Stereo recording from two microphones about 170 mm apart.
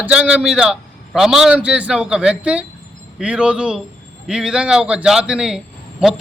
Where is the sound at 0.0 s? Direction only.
5° right (ahead or behind).